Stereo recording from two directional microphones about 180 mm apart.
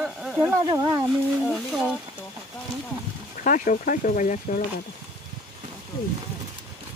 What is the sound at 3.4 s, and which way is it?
Speech, 50° left (ahead or behind).